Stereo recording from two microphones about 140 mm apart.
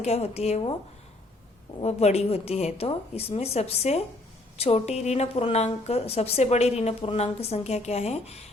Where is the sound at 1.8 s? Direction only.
50° left (ahead or behind).